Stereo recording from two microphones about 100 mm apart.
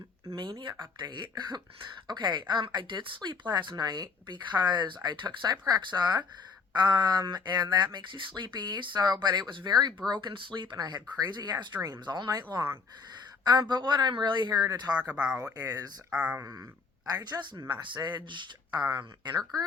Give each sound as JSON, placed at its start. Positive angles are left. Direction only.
{"t": 0.3, "sound": "speech", "side_deg": -55}
{"t": 14.9, "sound": "speech", "side_deg": -10}
{"t": 15.5, "sound": "speech", "side_deg": -35}
{"t": 16.0, "sound": "speech", "side_deg": -10}
{"t": 16.4, "sound": "speech", "side_deg": -35}